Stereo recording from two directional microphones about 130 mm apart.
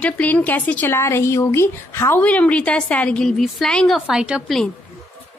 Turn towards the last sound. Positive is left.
turn(degrees=-5)  # may be behind; listen again after turning